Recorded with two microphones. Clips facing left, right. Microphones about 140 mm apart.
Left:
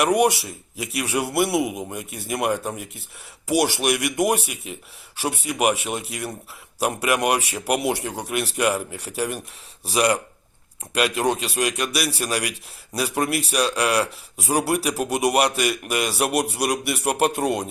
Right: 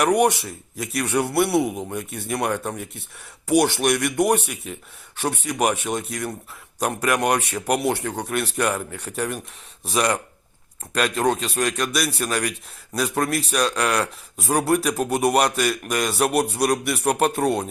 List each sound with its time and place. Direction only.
0.0 s a man's voice: 10° left (ahead or behind)